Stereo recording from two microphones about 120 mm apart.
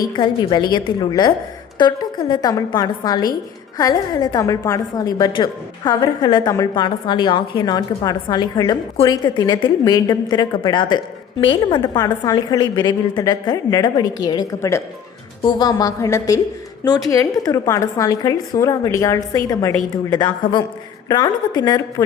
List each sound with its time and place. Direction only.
0.0 s a woman's voice: 40° left (ahead or behind)